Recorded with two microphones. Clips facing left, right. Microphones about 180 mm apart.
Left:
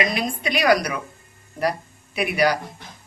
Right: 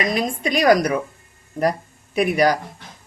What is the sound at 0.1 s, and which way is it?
Speech, 45° right (ahead or behind).